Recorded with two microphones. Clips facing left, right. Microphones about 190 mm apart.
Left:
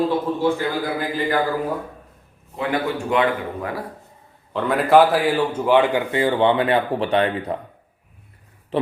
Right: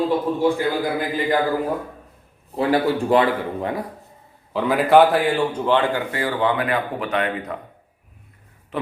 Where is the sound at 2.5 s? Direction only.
35° right (ahead or behind).